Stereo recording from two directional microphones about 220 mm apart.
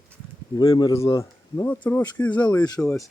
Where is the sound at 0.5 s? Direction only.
20° left (ahead or behind).